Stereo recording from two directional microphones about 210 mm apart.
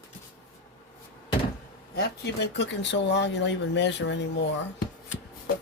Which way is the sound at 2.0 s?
55° left (ahead or behind).